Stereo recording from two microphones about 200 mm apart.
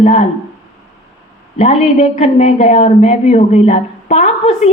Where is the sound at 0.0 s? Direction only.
30° left (ahead or behind).